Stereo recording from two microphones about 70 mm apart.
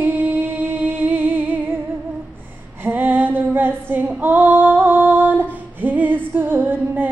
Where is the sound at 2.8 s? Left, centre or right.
Right.